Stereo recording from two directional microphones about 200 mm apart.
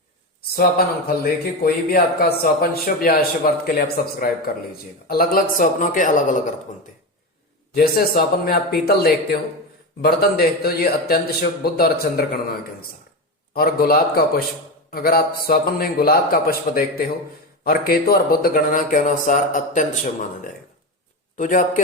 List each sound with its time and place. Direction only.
0.5 s a man's voice: 50° left (ahead or behind)
7.7 s a man's voice: 50° left (ahead or behind)
21.3 s speech: 40° left (ahead or behind)